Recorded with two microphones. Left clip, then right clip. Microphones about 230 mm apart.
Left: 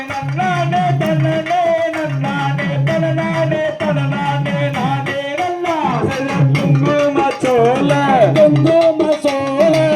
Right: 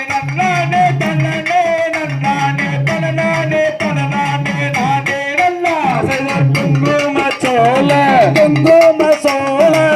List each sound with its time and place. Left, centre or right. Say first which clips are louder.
5.4 s guitar: right 5 dB; right
6.8 s music: even; right
9.0 s music: right 3 dB; centre